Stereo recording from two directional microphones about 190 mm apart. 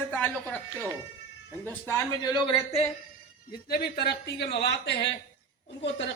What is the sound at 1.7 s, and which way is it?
Speech, 10° left (ahead or behind).